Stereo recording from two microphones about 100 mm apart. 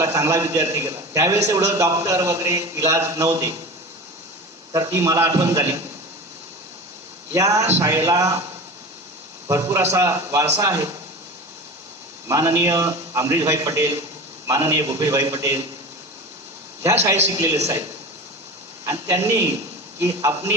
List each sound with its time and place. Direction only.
0.0 s a man's voice: 35° right (ahead or behind)
4.7 s a man's voice: 35° right (ahead or behind)
7.3 s a man's voice: 35° right (ahead or behind)
9.5 s a man's voice: 35° right (ahead or behind)
12.3 s a man's voice: 35° right (ahead or behind)
17.3 s speech: 30° right (ahead or behind)
18.9 s speech: 30° right (ahead or behind)